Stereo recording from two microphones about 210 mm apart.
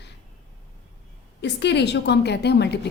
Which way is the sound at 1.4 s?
55° left (ahead or behind).